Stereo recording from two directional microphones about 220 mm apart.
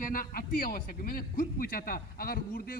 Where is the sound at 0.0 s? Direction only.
40° left (ahead or behind).